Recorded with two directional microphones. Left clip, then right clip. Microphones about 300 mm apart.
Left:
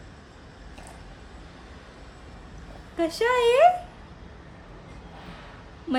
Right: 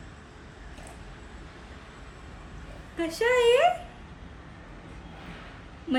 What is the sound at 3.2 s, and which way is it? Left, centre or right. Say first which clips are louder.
Speech: left 1 dB; left.